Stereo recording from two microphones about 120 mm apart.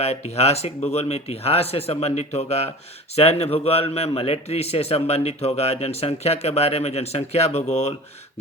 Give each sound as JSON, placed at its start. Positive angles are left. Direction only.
{"t": 0.0, "sound": "a man's voice", "side_deg": 65}